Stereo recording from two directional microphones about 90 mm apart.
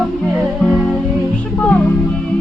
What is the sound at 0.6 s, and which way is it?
Music, 5° left (ahead or behind).